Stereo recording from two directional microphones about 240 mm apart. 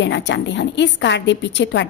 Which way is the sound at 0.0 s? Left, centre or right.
Left.